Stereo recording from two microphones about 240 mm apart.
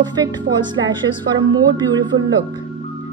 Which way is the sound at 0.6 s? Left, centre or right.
Centre.